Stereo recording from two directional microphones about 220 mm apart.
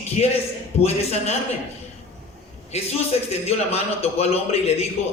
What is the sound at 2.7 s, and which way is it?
A man's voice, 30° left (ahead or behind).